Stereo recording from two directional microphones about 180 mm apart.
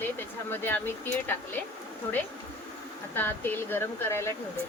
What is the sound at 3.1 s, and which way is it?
Speech, 10° left (ahead or behind).